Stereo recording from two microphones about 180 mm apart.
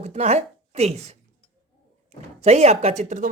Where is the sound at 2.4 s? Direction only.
40° right (ahead or behind).